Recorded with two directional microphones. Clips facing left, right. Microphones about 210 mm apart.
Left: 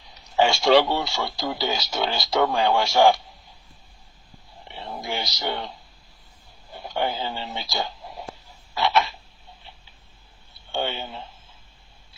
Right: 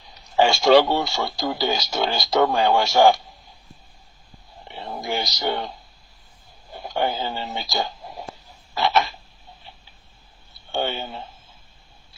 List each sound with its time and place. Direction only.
0.3 s speech: 40° right (ahead or behind)
4.9 s speech: 45° right (ahead or behind)
6.8 s speech: 45° right (ahead or behind)
8.7 s frog: 45° right (ahead or behind)
10.7 s speech: 45° right (ahead or behind)